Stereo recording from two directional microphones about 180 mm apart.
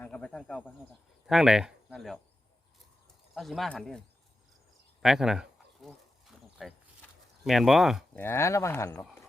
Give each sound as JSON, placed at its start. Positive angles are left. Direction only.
{"t": 0.0, "sound": "speech", "side_deg": 5}
{"t": 3.3, "sound": "speech", "side_deg": 0}
{"t": 5.0, "sound": "a sound", "side_deg": 0}
{"t": 7.4, "sound": "speech", "side_deg": 0}
{"t": 8.1, "sound": "speech", "side_deg": 10}